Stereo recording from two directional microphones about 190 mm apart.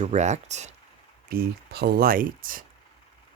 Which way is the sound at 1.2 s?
50° right (ahead or behind).